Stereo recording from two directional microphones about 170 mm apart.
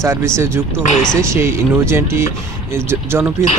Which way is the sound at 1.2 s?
15° right (ahead or behind).